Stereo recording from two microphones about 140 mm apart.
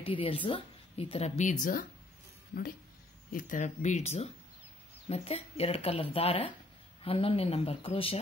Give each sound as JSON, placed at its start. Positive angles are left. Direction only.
{"t": 0.0, "sound": "speech", "side_deg": 40}
{"t": 3.3, "sound": "speech", "side_deg": 75}